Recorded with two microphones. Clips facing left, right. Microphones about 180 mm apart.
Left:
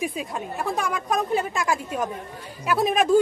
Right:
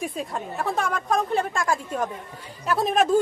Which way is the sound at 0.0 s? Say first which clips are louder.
Left 1 dB; 5° left (ahead or behind).